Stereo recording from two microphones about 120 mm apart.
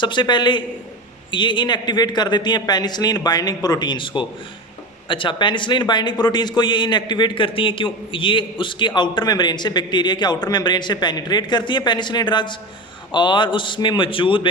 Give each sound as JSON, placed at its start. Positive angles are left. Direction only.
{"t": 0.0, "sound": "a man's voice", "side_deg": 40}